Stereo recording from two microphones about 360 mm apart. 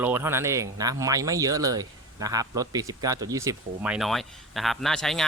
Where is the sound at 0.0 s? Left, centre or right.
Centre.